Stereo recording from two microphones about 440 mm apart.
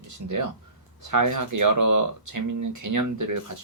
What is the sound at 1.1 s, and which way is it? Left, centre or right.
Speech, right.